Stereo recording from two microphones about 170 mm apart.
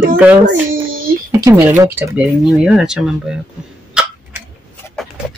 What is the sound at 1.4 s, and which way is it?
Speech, 10° right (ahead or behind).